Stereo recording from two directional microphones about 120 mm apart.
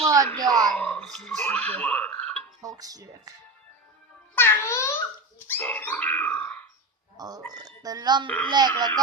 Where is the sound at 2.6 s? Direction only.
30° right (ahead or behind).